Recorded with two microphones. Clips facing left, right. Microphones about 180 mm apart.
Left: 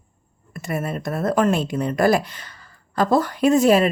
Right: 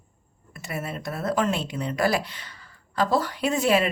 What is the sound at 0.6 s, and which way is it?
Speech, 50° left (ahead or behind).